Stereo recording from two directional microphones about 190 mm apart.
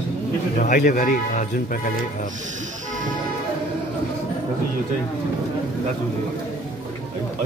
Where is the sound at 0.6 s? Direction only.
45° left (ahead or behind).